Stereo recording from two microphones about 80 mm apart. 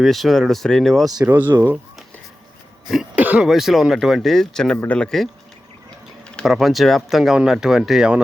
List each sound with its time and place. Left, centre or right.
0.0 s speech: centre
1.2 s speech: right
2.8 s cough: centre
3.2 s throat clearing: right
3.4 s speech: centre
6.4 s speech: centre